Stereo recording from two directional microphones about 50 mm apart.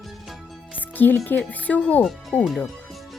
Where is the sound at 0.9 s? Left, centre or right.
Left.